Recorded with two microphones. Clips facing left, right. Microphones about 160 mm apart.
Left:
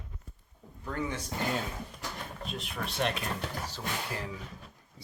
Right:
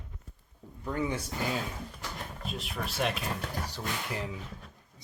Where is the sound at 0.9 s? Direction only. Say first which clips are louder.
Right 3 dB; 15° right (ahead or behind).